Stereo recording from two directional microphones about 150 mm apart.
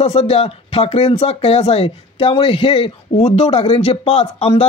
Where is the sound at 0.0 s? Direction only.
40° left (ahead or behind).